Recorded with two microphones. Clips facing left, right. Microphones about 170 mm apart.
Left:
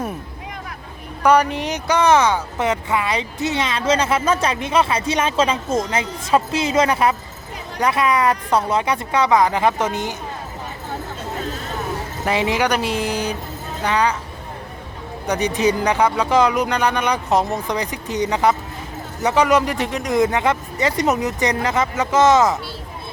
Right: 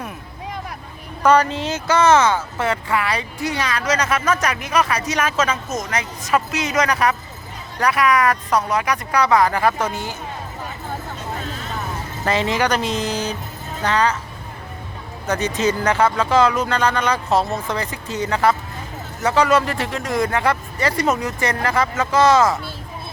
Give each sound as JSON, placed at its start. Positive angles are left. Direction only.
{"t": 1.2, "sound": "speech", "side_deg": 15}
{"t": 12.2, "sound": "speech", "side_deg": 10}
{"t": 15.3, "sound": "speech", "side_deg": 15}